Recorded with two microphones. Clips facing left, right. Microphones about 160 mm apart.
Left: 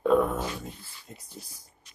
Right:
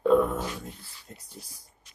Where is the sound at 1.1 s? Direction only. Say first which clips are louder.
Left 1 dB; 10° left (ahead or behind).